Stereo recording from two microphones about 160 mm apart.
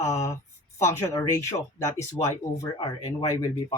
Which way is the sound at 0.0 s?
20° left (ahead or behind).